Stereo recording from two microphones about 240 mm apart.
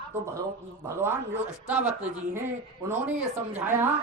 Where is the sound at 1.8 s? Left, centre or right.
Right.